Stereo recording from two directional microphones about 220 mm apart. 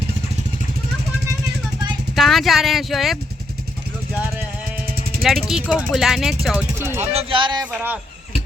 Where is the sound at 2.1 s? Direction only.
Centre (ahead or behind).